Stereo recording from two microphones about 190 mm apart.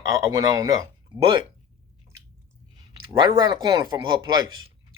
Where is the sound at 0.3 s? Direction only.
20° right (ahead or behind).